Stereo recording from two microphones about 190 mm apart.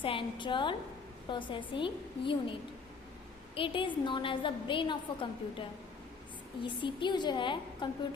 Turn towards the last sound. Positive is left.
turn(degrees=25)  # may be behind; listen again after turning